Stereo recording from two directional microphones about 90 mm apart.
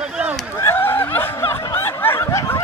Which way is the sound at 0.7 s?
25° left (ahead or behind).